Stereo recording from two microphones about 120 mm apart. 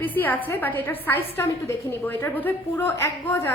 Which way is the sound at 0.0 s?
15° left (ahead or behind).